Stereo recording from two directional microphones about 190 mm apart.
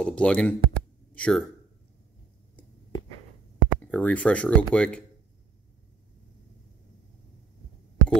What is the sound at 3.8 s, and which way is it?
Speech, 5° left (ahead or behind).